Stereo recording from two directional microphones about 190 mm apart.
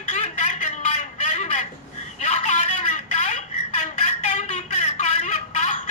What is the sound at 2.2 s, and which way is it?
Telephone, 35° left (ahead or behind).